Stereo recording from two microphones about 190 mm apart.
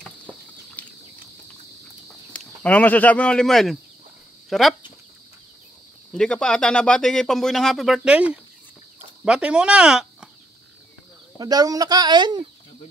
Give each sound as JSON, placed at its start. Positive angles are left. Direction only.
{"t": 0.8, "sound": "a sound", "side_deg": 10}
{"t": 2.0, "sound": "speech", "side_deg": 5}
{"t": 6.1, "sound": "speech", "side_deg": 5}
{"t": 11.3, "sound": "speech", "side_deg": -20}